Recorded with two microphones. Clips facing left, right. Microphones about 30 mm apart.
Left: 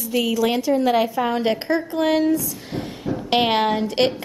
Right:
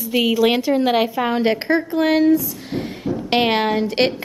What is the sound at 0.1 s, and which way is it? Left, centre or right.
A woman's voice, right.